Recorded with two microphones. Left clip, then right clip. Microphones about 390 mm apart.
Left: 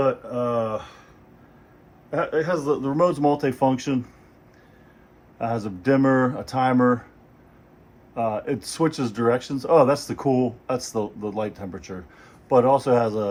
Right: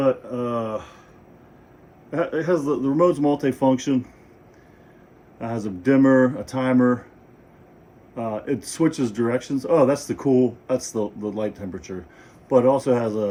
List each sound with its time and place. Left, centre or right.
0.0 s speech: centre
2.0 s speech: centre
5.4 s speech: centre
8.1 s speech: centre